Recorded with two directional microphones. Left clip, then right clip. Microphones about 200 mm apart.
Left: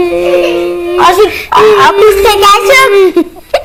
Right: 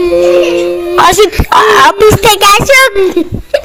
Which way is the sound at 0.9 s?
40° right (ahead or behind).